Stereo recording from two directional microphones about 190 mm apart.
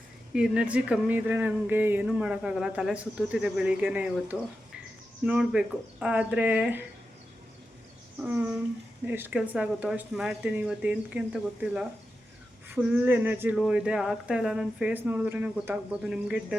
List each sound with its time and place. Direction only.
0.3 s speech: 5° right (ahead or behind)
9.0 s speech: 10° right (ahead or behind)